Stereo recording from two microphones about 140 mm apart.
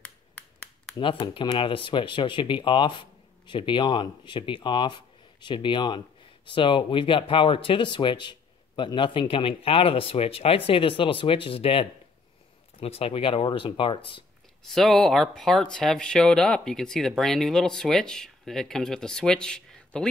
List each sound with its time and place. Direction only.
0.9 s speech: 35° left (ahead or behind)
14.7 s speech: centre (ahead or behind)